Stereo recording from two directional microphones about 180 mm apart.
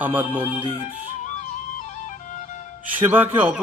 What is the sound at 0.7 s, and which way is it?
Flute, 40° left (ahead or behind).